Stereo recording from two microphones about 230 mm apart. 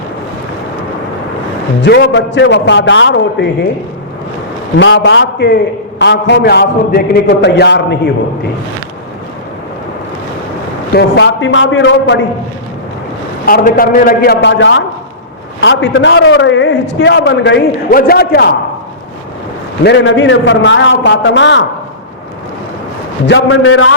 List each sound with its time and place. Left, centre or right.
1.8 s a man's voice: left
4.8 s a man's voice: left
10.9 s a man's voice: left
13.4 s a man's voice: left
19.8 s a man's voice: left
23.2 s a man's voice: left